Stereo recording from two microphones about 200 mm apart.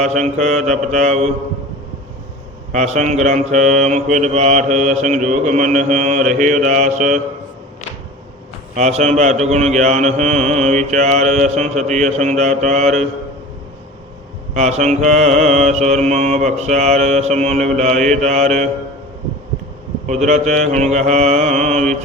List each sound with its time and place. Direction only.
0.3 s mantra: 35° right (ahead or behind)
2.7 s mantra: 35° right (ahead or behind)
8.7 s mantra: 35° right (ahead or behind)
14.5 s mantra: 35° right (ahead or behind)
20.1 s mantra: 35° right (ahead or behind)